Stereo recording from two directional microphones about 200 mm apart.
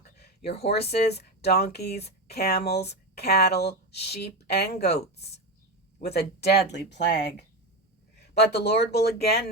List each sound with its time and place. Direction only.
0.2 s a sound: 55° left (ahead or behind)
0.7 s speech: 55° left (ahead or behind)
8.4 s speech: 55° left (ahead or behind)